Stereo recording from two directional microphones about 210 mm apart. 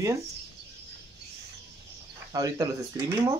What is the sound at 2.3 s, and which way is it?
Speech, 15° right (ahead or behind).